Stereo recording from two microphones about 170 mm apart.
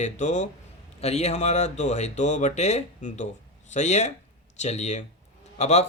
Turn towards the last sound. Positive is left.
turn(degrees=40)  # may be behind; listen again after turning